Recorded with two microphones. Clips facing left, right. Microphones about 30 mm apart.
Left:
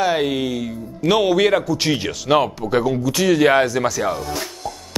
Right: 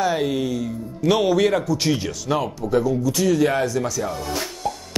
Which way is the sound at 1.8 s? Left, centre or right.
Left.